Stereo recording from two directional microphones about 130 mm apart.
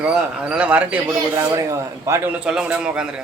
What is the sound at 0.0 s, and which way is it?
Speech, 5° right (ahead or behind).